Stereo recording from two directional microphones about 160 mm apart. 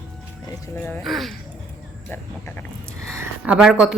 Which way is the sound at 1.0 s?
Centre (ahead or behind).